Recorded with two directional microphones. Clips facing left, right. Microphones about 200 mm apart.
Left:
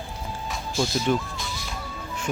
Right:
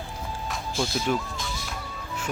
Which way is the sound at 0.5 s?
Centre (ahead or behind).